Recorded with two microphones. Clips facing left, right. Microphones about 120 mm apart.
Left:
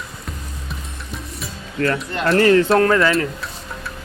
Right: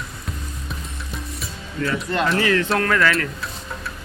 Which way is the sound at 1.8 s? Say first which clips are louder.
Left 1 dB; 65° left (ahead or behind).